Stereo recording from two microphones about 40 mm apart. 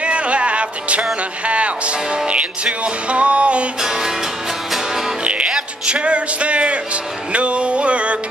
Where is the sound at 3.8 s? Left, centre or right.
Centre.